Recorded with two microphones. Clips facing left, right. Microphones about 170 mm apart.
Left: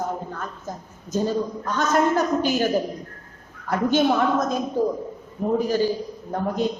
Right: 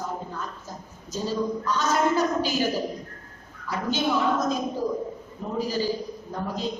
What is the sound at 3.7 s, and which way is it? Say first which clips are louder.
Speech: left 6 dB; 55° left (ahead or behind).